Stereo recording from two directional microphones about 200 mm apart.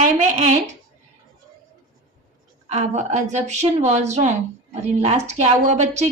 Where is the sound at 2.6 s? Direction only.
35° right (ahead or behind).